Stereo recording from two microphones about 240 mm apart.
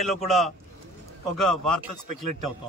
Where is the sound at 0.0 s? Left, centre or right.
Centre.